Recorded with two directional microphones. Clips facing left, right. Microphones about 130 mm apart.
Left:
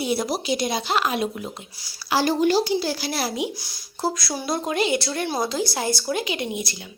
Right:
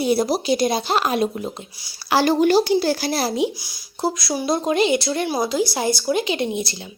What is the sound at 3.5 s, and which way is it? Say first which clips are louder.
Speech: even; 10° right (ahead or behind).